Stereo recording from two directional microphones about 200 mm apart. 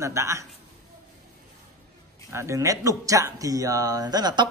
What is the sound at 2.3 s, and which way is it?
Speech, 15° right (ahead or behind).